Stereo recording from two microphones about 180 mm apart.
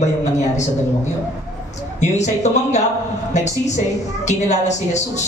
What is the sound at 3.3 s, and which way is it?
A woman's voice, 40° left (ahead or behind).